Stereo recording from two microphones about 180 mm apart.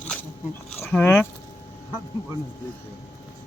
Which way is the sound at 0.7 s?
10° left (ahead or behind).